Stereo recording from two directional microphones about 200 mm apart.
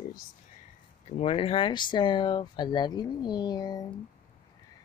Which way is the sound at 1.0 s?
30° left (ahead or behind).